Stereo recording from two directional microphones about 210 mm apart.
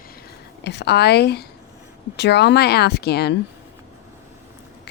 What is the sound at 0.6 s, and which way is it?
Speech, 55° left (ahead or behind).